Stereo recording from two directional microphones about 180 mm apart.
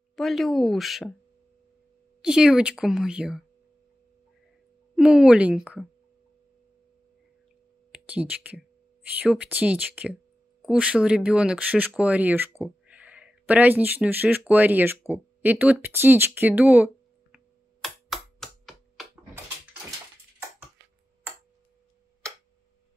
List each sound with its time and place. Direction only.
0.1 s speech: centre (ahead or behind)
2.2 s speech: 5° right (ahead or behind)
4.9 s speech: 5° right (ahead or behind)
7.9 s speech: 5° right (ahead or behind)
17.8 s a sound: centre (ahead or behind)